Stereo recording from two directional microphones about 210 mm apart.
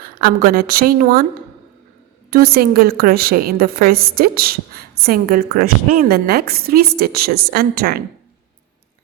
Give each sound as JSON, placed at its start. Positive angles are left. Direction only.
{"t": 0.0, "sound": "a woman's voice", "side_deg": -45}
{"t": 2.3, "sound": "a woman's voice", "side_deg": -45}